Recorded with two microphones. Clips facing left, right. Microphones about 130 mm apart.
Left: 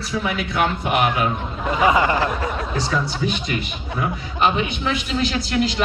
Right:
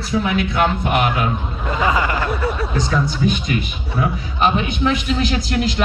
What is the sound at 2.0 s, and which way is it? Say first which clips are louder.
Speech: left 2 dB; 35° left (ahead or behind).